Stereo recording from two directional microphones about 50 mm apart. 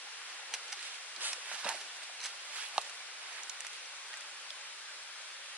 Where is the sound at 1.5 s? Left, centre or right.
Right.